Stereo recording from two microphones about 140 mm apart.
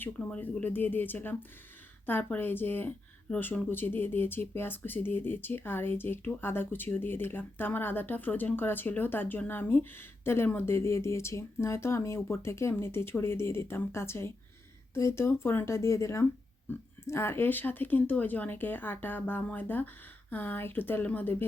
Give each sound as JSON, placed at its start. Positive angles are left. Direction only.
{"t": 0.0, "sound": "a woman's voice", "side_deg": 10}